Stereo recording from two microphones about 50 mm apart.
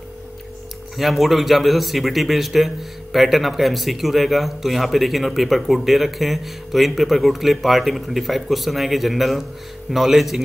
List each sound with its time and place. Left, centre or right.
0.9 s a man's voice: centre